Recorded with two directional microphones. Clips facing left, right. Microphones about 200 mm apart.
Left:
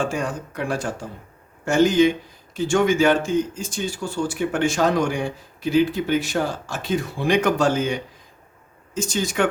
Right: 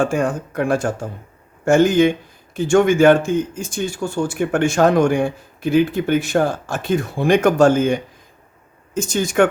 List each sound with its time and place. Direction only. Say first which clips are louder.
0.0 s speech: right 6 dB; 50° right (ahead or behind)